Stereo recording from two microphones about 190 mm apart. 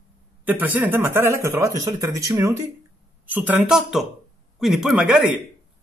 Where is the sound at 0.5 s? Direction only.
10° right (ahead or behind).